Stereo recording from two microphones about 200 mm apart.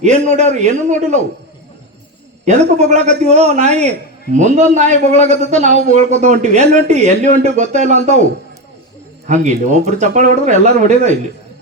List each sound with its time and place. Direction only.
0.0 s a man's voice: 35° right (ahead or behind)
2.4 s a man's voice: 35° right (ahead or behind)
9.2 s a man's voice: 35° right (ahead or behind)